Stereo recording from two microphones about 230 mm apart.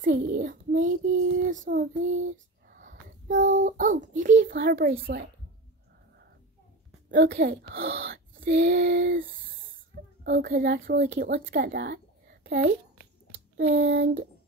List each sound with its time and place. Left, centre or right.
0.0 s speech: right
2.7 s a sound: right
4.4 s speech: right
7.1 s speech: right